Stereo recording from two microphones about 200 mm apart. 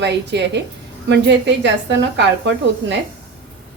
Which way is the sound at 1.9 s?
60° right (ahead or behind).